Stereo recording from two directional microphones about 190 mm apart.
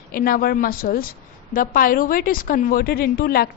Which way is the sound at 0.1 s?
50° left (ahead or behind).